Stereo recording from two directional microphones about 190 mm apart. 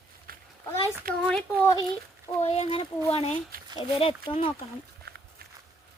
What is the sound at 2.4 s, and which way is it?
A child's voice, 35° left (ahead or behind).